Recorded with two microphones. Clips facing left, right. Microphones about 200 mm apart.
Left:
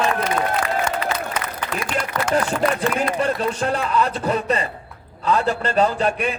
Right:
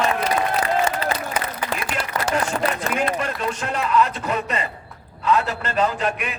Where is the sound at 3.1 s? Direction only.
35° left (ahead or behind).